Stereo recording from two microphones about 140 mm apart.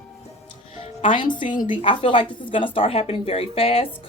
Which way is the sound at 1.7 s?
35° left (ahead or behind).